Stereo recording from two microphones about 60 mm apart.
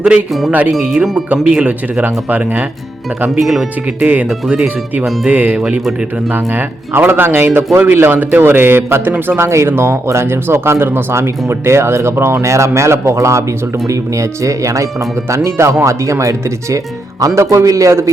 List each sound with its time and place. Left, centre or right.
0.0 s speech: centre
1.5 s speech: right
3.2 s speech: centre
4.0 s speech: right
4.3 s speech: centre
5.3 s a man's voice: right
9.4 s speech: right
15.4 s speech: right